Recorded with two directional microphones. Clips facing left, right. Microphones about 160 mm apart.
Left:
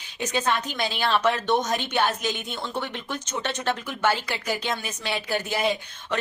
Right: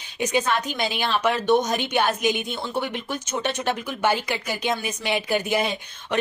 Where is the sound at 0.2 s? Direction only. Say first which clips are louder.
Right 3 dB; 15° right (ahead or behind).